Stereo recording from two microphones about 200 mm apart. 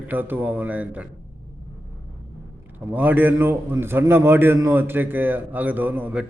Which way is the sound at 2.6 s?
10° right (ahead or behind).